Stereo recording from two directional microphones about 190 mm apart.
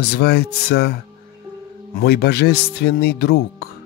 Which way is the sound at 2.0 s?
60° left (ahead or behind).